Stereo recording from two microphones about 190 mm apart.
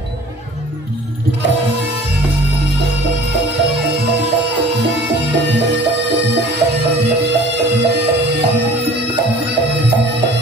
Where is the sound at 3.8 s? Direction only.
65° right (ahead or behind).